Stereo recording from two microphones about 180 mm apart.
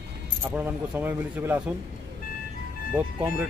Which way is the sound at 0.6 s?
10° right (ahead or behind).